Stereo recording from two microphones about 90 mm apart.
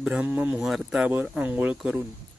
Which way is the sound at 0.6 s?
5° right (ahead or behind).